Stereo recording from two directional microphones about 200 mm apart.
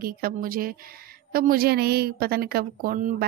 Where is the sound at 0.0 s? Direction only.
45° right (ahead or behind).